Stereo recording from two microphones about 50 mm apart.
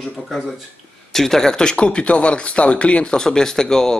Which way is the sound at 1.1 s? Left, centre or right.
Centre.